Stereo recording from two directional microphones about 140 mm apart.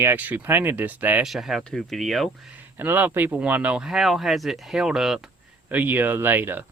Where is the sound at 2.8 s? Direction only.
15° right (ahead or behind).